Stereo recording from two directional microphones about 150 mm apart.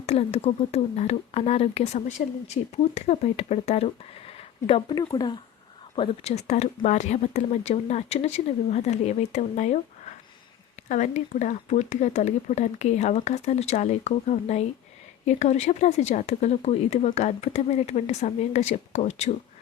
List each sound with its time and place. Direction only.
0.0 s speech: 45° left (ahead or behind)
4.9 s speech: 30° left (ahead or behind)
6.0 s speech: 45° left (ahead or behind)